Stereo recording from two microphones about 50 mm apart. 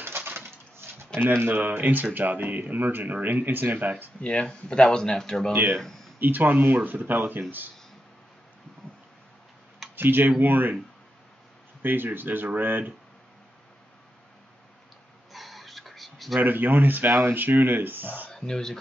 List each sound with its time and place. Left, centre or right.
0.0 s coin: right
0.7 s speech: right
4.2 s speech: left
5.5 s speech: right
5.8 s speech: centre
6.1 s speech: right
9.9 s speech: right
11.8 s speech: right
15.3 s whispering: centre
16.3 s speech: right
18.3 s speech: centre